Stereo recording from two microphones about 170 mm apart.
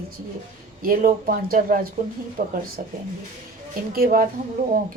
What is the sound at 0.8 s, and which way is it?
A woman's voice, 55° right (ahead or behind).